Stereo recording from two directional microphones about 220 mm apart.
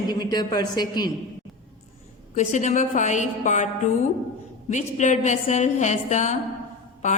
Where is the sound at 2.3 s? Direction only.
35° left (ahead or behind).